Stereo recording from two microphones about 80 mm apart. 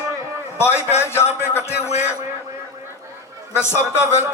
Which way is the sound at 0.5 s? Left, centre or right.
Left.